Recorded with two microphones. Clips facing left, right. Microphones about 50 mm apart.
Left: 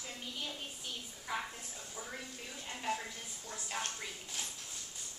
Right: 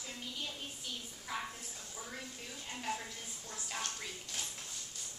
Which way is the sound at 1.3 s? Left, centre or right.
Centre.